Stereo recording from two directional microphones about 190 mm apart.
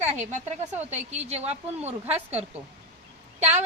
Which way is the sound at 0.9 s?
35° right (ahead or behind).